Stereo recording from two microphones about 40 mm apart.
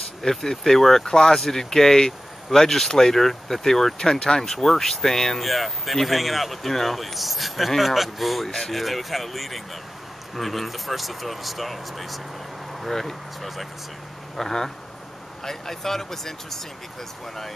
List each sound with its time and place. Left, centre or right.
0.2 s speech: centre